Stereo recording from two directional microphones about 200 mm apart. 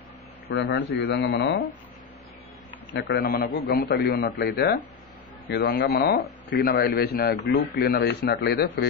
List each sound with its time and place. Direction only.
0.5 s speech: 60° left (ahead or behind)
2.9 s a man's voice: 55° left (ahead or behind)